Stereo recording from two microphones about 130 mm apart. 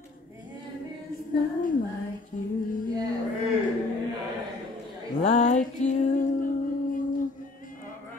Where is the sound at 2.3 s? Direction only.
75° left (ahead or behind).